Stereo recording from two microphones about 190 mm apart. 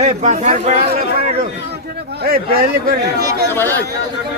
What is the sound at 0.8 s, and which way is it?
Speech, 50° right (ahead or behind).